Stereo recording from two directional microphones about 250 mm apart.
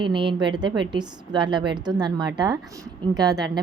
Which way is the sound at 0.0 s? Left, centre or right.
Centre.